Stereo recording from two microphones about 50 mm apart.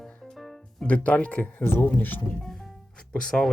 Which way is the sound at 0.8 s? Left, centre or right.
Left.